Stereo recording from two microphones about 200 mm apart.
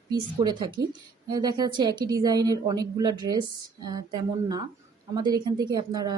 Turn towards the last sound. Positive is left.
turn(degrees=-20)  # may be behind; listen again after turning